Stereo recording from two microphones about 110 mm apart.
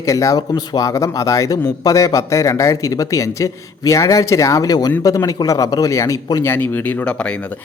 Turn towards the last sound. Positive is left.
turn(degrees=20)  # may be behind; listen again after turning